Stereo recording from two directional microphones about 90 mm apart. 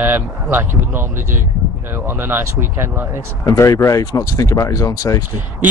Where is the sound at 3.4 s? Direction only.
40° left (ahead or behind).